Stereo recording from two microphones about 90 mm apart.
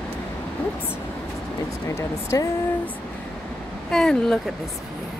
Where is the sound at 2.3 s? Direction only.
45° left (ahead or behind).